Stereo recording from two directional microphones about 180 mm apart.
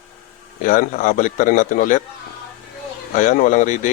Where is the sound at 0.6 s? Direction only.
45° left (ahead or behind).